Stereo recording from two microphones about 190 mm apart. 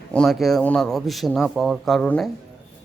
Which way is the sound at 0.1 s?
Centre (ahead or behind).